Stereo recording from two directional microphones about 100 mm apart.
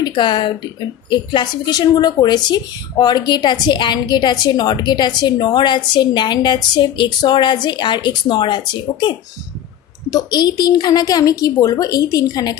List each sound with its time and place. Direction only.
0.0 s a woman's voice: 50° left (ahead or behind)